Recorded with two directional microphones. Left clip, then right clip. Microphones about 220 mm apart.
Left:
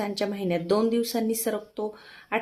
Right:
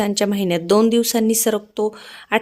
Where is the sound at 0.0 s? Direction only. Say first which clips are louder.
Right 9 dB; 45° right (ahead or behind).